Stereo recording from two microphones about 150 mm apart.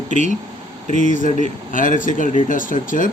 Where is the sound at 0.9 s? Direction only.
60° left (ahead or behind).